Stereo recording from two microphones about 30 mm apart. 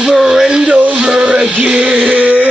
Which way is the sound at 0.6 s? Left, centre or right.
Right.